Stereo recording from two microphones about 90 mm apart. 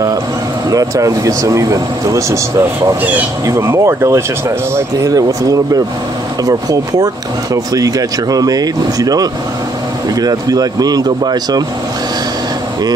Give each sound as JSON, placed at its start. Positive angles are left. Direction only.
{"t": 0.7, "sound": "speech", "side_deg": -40}
{"t": 3.4, "sound": "speech", "side_deg": -30}